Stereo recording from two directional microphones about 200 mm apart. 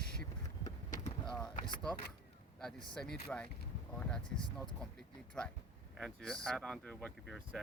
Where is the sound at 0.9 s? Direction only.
35° left (ahead or behind).